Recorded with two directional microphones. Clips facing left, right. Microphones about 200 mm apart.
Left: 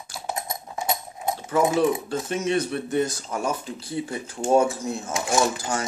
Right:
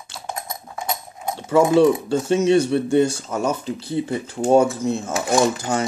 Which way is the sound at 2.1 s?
30° right (ahead or behind).